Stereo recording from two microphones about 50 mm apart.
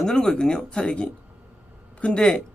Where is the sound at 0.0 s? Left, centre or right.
Centre.